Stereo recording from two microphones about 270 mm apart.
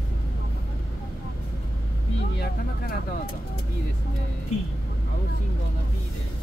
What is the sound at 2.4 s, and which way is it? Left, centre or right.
Vehicle, left.